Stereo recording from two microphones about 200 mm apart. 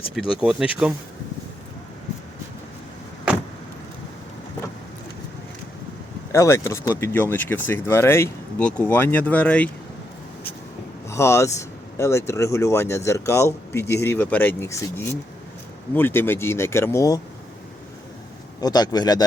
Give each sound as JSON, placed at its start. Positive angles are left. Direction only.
{"t": 0.2, "sound": "speech", "side_deg": -5}
{"t": 6.3, "sound": "speech", "side_deg": 15}
{"t": 11.1, "sound": "speech", "side_deg": 15}
{"t": 18.6, "sound": "speech", "side_deg": 20}